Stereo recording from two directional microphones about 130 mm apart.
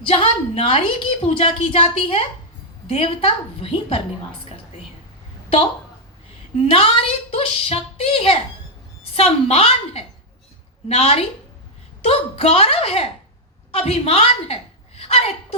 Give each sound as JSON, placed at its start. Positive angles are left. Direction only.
{"t": 0.0, "sound": "a woman's voice", "side_deg": 45}
{"t": 6.6, "sound": "a woman's voice", "side_deg": 45}